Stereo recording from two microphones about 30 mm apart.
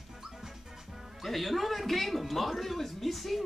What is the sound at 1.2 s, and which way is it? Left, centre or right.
A man's voice, centre.